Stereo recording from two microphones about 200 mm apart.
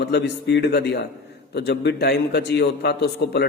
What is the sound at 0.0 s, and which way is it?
A man's voice, 55° left (ahead or behind).